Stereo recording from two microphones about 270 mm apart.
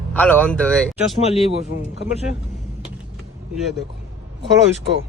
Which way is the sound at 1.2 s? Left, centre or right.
Left.